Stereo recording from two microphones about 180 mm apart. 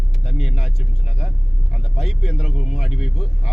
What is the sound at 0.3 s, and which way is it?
Speech, centre (ahead or behind).